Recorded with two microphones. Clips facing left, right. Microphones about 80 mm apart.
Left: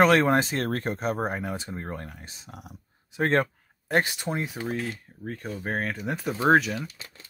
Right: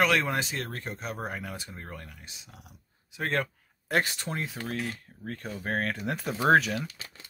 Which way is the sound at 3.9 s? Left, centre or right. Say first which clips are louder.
Left 3 dB; centre.